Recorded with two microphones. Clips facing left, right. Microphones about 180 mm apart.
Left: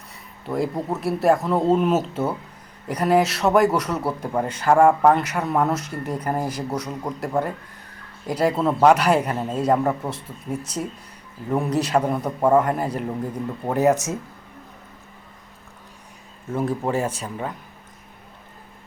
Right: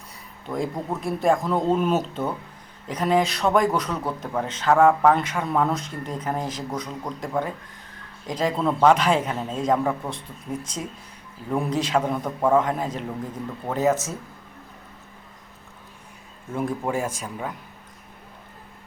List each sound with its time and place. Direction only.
0.4 s speech: 5° left (ahead or behind)
16.6 s speech: centre (ahead or behind)
16.9 s speech: 10° right (ahead or behind)